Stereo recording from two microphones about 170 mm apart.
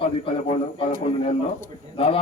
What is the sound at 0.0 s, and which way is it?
A man's voice, 35° left (ahead or behind).